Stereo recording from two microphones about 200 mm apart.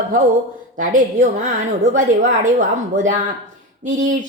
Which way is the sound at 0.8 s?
40° right (ahead or behind).